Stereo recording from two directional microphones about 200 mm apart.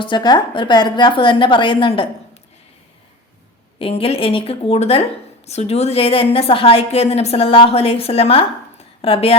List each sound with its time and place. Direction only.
0.0 s a woman's voice: 20° left (ahead or behind)
3.8 s a woman's voice: 30° left (ahead or behind)